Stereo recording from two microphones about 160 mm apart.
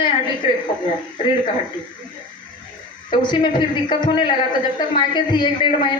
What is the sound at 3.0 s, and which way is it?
A woman's voice, 30° left (ahead or behind).